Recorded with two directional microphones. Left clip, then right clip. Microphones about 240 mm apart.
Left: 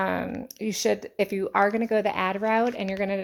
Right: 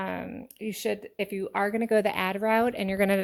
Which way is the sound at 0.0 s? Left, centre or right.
Centre.